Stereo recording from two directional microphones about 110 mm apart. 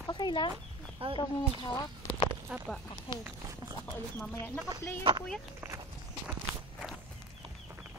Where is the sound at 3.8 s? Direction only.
15° left (ahead or behind).